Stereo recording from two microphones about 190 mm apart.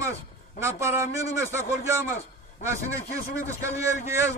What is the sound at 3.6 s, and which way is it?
Speech, 15° right (ahead or behind).